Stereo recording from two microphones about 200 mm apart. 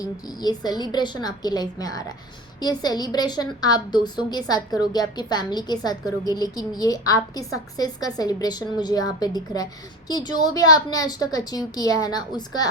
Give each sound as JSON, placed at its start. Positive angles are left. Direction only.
{"t": 0.0, "sound": "a woman's voice", "side_deg": 20}